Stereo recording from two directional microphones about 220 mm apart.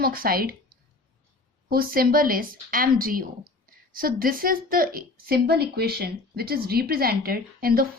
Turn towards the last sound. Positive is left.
turn(degrees=-45)  # may be behind; listen again after turning